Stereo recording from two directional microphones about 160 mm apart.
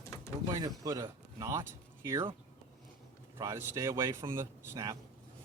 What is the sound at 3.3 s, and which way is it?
Speech, 20° right (ahead or behind).